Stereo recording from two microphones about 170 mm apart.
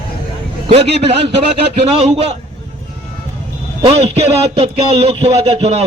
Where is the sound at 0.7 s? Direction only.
35° right (ahead or behind).